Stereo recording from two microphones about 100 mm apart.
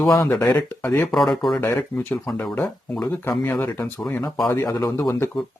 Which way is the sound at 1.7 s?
15° left (ahead or behind).